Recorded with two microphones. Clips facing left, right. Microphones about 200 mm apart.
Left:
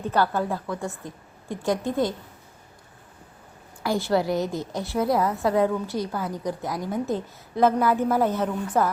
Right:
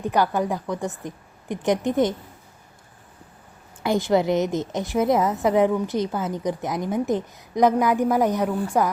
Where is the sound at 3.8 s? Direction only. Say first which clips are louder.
Right 3 dB; 20° right (ahead or behind).